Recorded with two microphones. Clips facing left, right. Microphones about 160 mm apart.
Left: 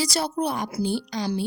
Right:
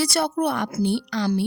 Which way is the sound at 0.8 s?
65° right (ahead or behind).